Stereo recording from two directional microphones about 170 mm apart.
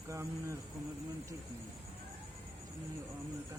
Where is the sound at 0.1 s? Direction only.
15° right (ahead or behind).